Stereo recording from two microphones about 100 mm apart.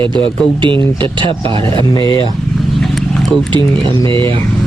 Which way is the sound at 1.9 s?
40° left (ahead or behind).